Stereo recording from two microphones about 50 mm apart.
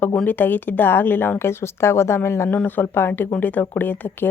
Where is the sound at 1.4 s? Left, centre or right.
Left.